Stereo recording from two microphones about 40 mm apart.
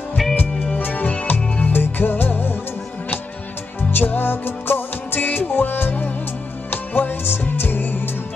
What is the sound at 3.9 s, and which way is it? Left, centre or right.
Music, left.